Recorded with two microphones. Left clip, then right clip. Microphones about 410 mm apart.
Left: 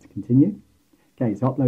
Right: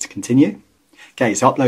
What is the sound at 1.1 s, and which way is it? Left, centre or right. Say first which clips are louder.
Speech: right 10 dB; centre.